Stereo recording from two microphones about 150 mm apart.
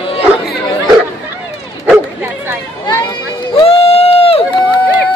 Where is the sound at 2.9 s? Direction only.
30° left (ahead or behind).